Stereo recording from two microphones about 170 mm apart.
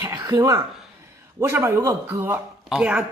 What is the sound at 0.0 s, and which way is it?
Throat clearing, 25° right (ahead or behind).